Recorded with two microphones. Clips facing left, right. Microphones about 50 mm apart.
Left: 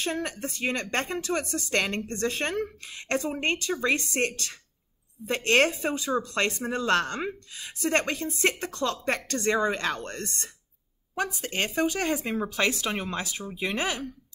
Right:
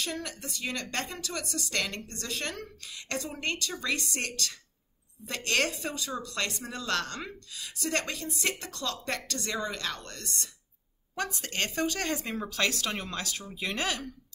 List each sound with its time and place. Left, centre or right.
0.0 s speech: left
11.1 s speech: centre